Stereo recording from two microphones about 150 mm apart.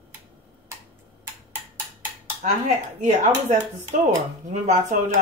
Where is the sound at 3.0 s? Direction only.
55° right (ahead or behind).